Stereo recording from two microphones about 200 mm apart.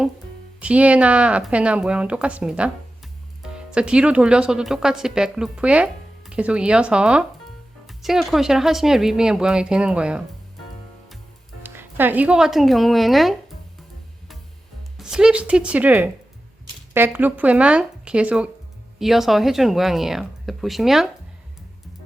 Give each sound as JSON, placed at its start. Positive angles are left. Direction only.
{"t": 0.6, "sound": "speech", "side_deg": -5}
{"t": 11.6, "sound": "speech", "side_deg": -10}
{"t": 14.9, "sound": "speech", "side_deg": -5}